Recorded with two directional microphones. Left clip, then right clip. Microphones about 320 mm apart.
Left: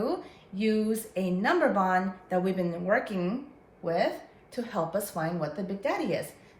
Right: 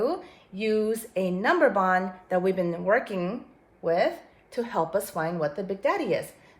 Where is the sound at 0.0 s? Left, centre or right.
Centre.